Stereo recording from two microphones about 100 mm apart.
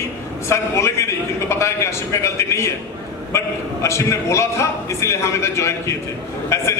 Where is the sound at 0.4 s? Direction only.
30° left (ahead or behind).